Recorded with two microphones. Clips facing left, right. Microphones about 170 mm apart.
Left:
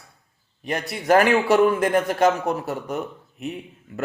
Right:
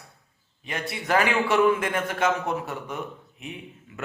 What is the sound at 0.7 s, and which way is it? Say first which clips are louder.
Speech: left 7 dB; 40° left (ahead or behind).